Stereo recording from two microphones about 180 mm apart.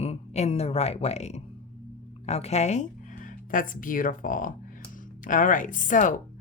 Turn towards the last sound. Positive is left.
turn(degrees=45)  # may be behind; listen again after turning